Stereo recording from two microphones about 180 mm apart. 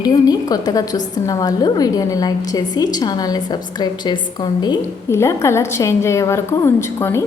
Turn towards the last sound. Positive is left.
turn(degrees=15)  # may be behind; listen again after turning